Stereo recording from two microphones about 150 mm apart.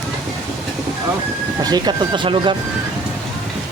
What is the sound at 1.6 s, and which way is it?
Speech, 30° right (ahead or behind).